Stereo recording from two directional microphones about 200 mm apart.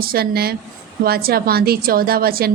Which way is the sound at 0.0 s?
50° right (ahead or behind).